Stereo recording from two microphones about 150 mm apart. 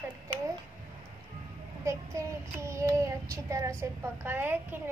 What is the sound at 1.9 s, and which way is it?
Child singing, 20° right (ahead or behind).